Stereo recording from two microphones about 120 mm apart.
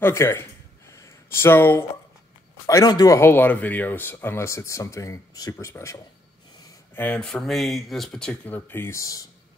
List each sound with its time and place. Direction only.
0.0 s a sound: 20° left (ahead or behind)
2.6 s speech: 30° left (ahead or behind)
3.2 s speech: 15° left (ahead or behind)
7.0 s speech: 10° left (ahead or behind); by 9.2 s 25° left (ahead or behind)